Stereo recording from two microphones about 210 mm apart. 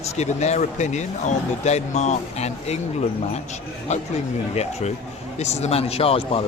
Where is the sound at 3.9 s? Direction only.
35° left (ahead or behind).